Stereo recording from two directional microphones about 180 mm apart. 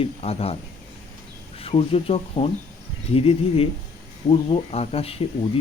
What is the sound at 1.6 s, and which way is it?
Speech, 30° left (ahead or behind).